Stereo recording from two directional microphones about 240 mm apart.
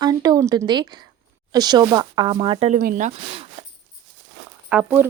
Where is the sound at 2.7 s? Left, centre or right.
Right.